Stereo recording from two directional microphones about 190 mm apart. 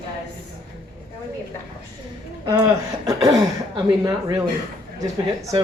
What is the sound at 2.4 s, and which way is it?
Speech, 20° right (ahead or behind).